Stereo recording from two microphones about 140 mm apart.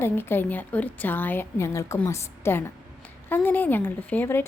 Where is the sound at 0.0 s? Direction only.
15° left (ahead or behind).